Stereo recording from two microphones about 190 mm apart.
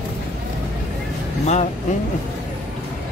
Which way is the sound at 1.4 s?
35° left (ahead or behind).